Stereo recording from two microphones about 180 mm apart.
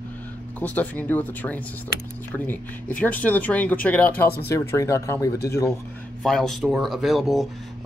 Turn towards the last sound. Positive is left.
turn(degrees=0)  # may be behind; listen again after turning